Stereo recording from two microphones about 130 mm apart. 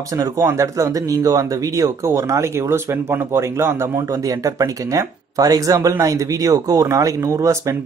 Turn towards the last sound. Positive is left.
turn(degrees=-25)  # may be behind; listen again after turning